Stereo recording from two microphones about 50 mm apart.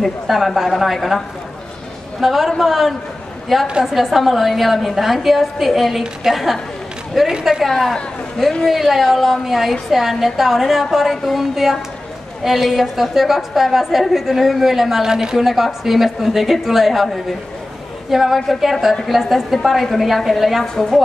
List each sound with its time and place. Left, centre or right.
0.0 s a woman's voice: centre